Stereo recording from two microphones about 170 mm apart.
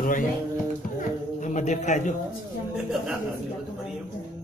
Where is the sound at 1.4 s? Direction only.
45° left (ahead or behind).